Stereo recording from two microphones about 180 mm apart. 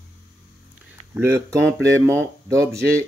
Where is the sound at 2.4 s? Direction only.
15° right (ahead or behind).